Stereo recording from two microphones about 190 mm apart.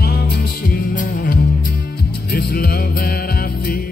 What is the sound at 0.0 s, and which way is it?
Music, 55° left (ahead or behind).